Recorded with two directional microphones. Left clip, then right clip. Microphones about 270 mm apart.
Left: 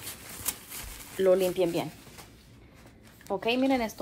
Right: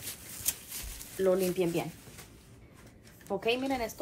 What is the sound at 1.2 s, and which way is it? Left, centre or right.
Speech, left.